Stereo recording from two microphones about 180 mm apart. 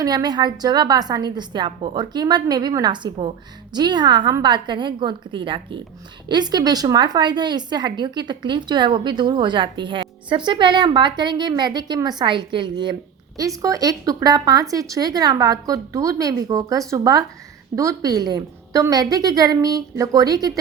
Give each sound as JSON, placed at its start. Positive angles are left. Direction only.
{"t": 0.0, "sound": "a woman's voice", "side_deg": -20}